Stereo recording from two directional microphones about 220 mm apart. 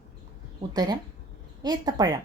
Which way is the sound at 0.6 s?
15° right (ahead or behind).